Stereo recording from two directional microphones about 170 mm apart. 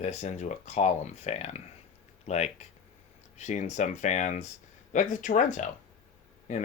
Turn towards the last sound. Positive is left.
turn(degrees=45)  # may be behind; listen again after turning